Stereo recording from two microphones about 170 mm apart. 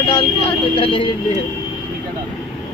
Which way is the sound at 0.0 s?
30° left (ahead or behind).